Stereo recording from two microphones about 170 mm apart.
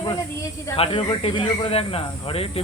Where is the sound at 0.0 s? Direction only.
20° left (ahead or behind).